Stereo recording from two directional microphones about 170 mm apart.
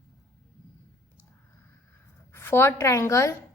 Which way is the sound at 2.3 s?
15° left (ahead or behind).